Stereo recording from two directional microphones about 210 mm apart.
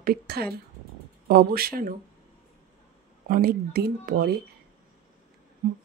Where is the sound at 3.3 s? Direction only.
45° right (ahead or behind).